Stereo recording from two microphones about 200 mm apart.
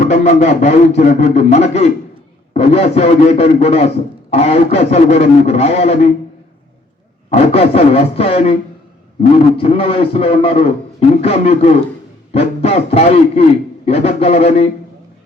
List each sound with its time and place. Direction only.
0.1 s a man's voice: 35° left (ahead or behind)
7.3 s a man's voice: 30° left (ahead or behind)
9.6 s a man's voice: 30° left (ahead or behind)